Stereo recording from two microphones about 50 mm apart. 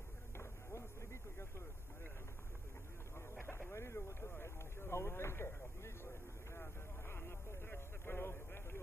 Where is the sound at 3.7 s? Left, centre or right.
Left.